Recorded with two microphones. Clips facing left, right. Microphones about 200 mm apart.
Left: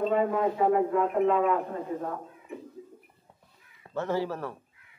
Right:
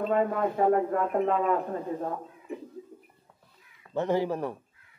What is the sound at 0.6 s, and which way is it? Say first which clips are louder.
Speech: right 2 dB; 45° right (ahead or behind).